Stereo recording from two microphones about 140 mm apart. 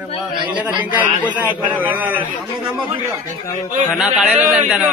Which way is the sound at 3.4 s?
15° left (ahead or behind).